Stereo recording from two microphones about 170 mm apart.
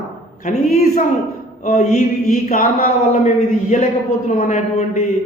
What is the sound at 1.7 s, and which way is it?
A man's voice, 40° left (ahead or behind).